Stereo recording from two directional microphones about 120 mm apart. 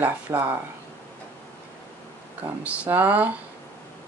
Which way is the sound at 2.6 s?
10° right (ahead or behind).